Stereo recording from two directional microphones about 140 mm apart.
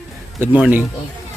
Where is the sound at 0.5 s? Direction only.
10° right (ahead or behind).